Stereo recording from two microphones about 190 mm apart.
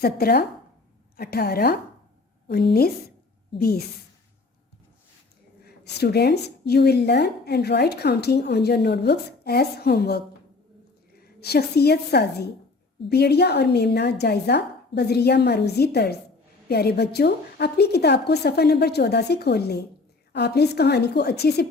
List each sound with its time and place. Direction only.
0.0 s a woman's voice: 55° left (ahead or behind)
5.6 s a woman's voice: 60° left (ahead or behind)